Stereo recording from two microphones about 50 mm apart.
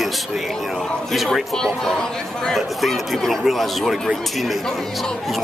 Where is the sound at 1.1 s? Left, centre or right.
Centre.